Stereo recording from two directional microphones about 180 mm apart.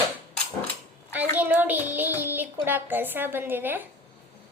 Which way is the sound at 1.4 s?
10° right (ahead or behind).